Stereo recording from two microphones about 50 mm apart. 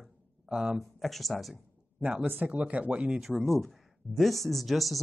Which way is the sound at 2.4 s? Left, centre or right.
Right.